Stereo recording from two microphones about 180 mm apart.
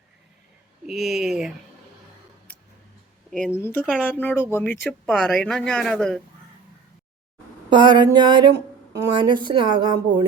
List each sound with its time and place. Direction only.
0.9 s speech: centre (ahead or behind)
2.5 s tick: 10° left (ahead or behind)
3.2 s speech: 5° left (ahead or behind)
7.7 s a woman's voice: 25° right (ahead or behind)